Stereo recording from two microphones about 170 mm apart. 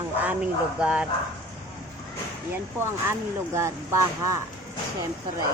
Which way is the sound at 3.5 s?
15° right (ahead or behind).